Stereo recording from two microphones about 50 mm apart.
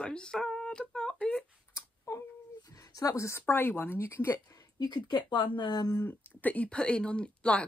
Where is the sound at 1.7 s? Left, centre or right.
Left.